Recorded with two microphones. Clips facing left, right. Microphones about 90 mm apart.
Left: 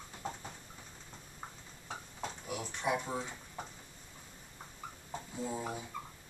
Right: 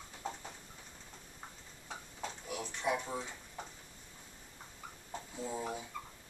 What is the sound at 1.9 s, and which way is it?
Drawer open or close, 5° left (ahead or behind).